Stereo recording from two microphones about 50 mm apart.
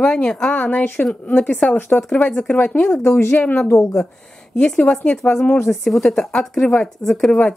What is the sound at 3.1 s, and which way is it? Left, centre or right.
Speech, left.